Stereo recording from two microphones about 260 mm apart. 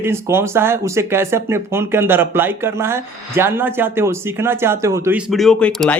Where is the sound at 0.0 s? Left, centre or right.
Centre.